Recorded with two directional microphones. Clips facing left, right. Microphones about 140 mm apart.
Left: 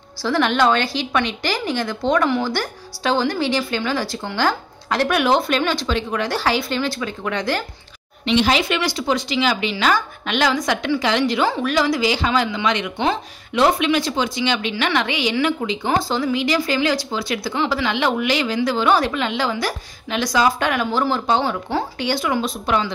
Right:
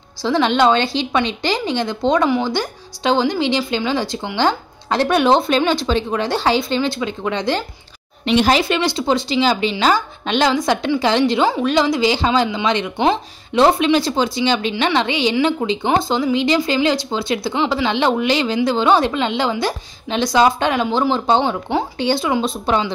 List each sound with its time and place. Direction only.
0.2 s speech: 20° right (ahead or behind)
8.3 s speech: 40° right (ahead or behind)